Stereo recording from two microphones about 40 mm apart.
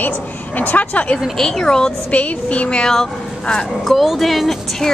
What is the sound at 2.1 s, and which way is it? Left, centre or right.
Speech, left.